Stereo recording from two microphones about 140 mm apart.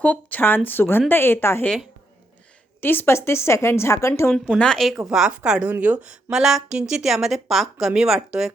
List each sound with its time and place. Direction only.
0.0 s a woman's voice: 10° left (ahead or behind)
2.8 s a woman's voice: 15° left (ahead or behind)
4.3 s a woman's voice: 5° left (ahead or behind)